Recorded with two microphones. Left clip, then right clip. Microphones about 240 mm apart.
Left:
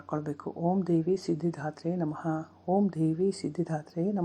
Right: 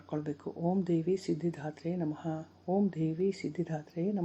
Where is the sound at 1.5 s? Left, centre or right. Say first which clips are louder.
Left 4 dB; centre.